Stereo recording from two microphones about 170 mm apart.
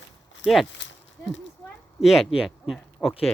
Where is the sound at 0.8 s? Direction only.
90° left.